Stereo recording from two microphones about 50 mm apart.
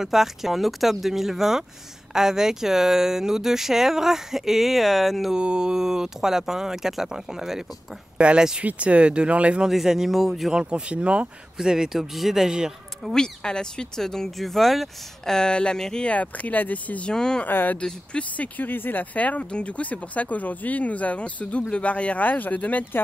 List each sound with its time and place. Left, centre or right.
0.0 s speech: centre
5.3 s speech: centre
8.2 s speech: right
9.7 s speech: centre
10.5 s speech: centre
11.5 s speech: centre
13.1 s speech: centre
15.3 s speech: centre
16.1 s speech: left
17.1 s speech: centre
17.5 s speech: left